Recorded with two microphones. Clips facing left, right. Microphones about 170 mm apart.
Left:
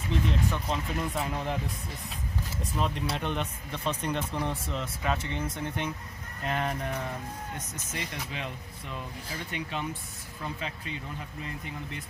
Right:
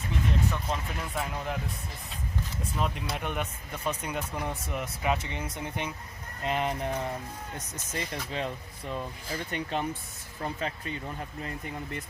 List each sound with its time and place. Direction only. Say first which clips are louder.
0.5 s speech: left 2 dB; centre (ahead or behind)
2.7 s speech: left 2 dB; centre (ahead or behind); by 7.0 s 20° right (ahead or behind)
7.9 s speech: right 4 dB; 35° right (ahead or behind)